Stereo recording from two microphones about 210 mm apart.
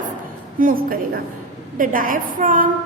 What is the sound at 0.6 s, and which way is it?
A woman's voice, 40° right (ahead or behind).